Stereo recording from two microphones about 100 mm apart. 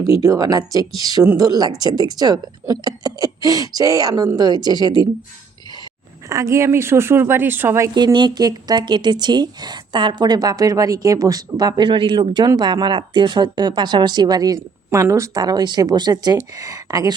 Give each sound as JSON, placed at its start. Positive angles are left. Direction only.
{"t": 0.0, "sound": "speech", "side_deg": -35}
{"t": 6.2, "sound": "a woman's voice", "side_deg": -30}
{"t": 7.9, "sound": "speech", "side_deg": -45}
{"t": 14.8, "sound": "speech", "side_deg": -25}